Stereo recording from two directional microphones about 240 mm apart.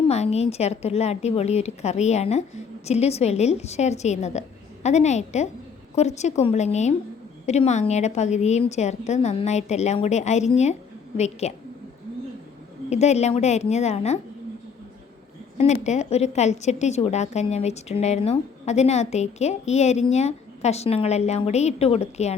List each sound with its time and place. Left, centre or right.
0.1 s a woman's voice: left
12.9 s a woman's voice: left
15.5 s a woman's voice: left